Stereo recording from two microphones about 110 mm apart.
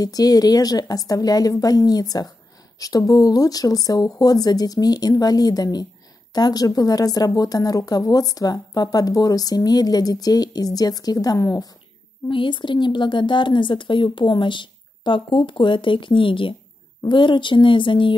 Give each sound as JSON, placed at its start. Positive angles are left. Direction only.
{"t": 0.0, "sound": "speech", "side_deg": 35}
{"t": 12.3, "sound": "speech", "side_deg": 45}